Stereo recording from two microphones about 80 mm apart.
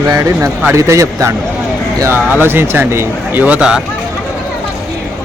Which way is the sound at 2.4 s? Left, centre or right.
Right.